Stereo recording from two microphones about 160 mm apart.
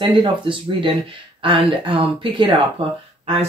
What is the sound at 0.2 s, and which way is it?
Speech, 30° right (ahead or behind).